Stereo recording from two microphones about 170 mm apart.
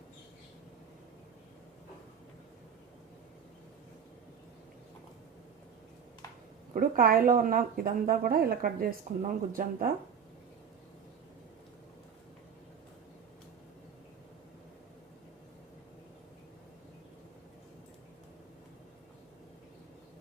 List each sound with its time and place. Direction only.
6.7 s speech: 60° right (ahead or behind)